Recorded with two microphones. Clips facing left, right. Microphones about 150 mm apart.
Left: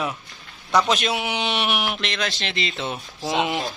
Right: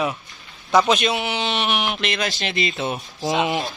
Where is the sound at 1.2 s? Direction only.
15° left (ahead or behind).